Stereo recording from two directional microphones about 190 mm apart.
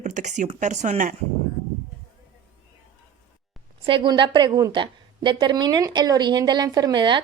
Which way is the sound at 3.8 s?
25° right (ahead or behind).